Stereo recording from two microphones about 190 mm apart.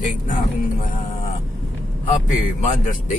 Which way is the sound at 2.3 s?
40° left (ahead or behind).